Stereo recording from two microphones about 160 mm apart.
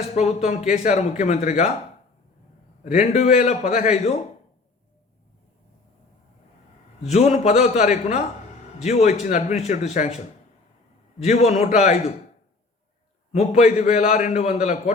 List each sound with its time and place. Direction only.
0.1 s a man's voice: 45° left (ahead or behind)
2.8 s a man's voice: 45° left (ahead or behind)
7.0 s a man's voice: 45° left (ahead or behind)
11.2 s a man's voice: 45° left (ahead or behind)
13.3 s a man's voice: 45° left (ahead or behind)